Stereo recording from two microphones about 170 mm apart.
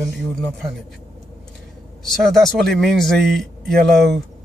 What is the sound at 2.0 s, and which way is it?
Speech, centre (ahead or behind).